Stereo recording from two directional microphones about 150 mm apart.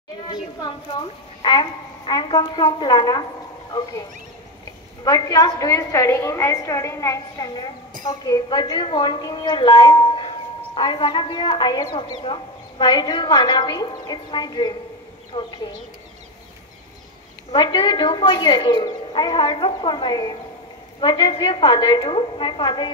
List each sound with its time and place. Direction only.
0.3 s a woman's voice: 25° left (ahead or behind)
5.0 s a woman's voice: 25° left (ahead or behind)
17.5 s a woman's voice: 30° left (ahead or behind)